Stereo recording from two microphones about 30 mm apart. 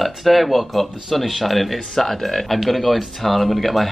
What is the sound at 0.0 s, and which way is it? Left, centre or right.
Speech, centre.